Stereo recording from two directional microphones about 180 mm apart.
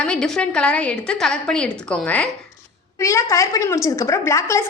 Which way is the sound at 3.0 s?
15° left (ahead or behind).